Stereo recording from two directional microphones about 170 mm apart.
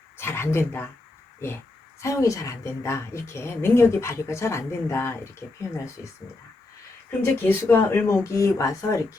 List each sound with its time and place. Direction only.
0.2 s speech: 15° left (ahead or behind)
2.0 s a woman's voice: 20° left (ahead or behind)
7.4 s a woman's voice: 15° left (ahead or behind)